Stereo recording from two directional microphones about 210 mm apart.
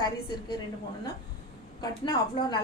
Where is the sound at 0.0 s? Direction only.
20° left (ahead or behind).